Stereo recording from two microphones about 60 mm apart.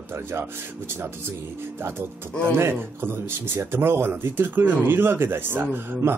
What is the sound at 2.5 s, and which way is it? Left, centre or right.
Speech, right.